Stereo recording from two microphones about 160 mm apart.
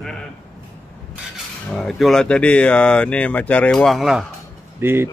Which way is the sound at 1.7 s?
Centre (ahead or behind).